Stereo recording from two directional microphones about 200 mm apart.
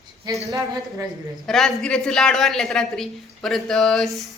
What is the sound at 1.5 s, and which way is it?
A man's voice, centre (ahead or behind).